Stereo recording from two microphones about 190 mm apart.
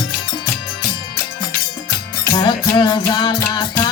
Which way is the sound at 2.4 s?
25° left (ahead or behind).